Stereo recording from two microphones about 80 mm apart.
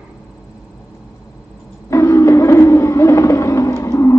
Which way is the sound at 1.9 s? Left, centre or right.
Left.